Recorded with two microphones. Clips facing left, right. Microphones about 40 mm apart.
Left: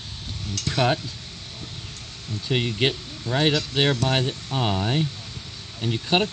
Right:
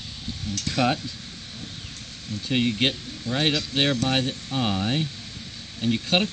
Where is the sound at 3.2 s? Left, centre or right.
Left.